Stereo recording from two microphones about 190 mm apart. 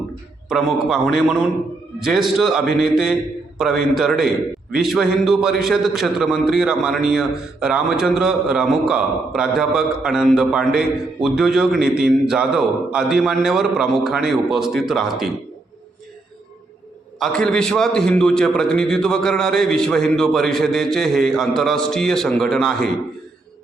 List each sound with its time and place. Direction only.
0.4 s a man's voice: centre (ahead or behind)
17.2 s a man's voice: 5° left (ahead or behind)